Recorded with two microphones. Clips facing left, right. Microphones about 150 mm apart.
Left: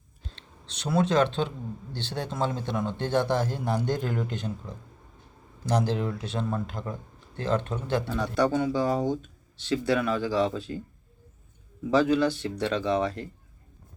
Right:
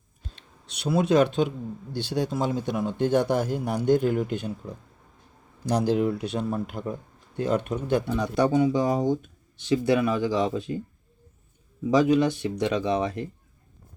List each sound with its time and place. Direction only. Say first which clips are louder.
0.3 s speech: even; 10° right (ahead or behind)
11.9 s speech: right 2 dB; 15° right (ahead or behind)